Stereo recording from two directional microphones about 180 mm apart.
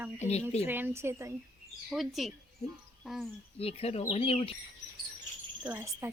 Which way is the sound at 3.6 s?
35° left (ahead or behind).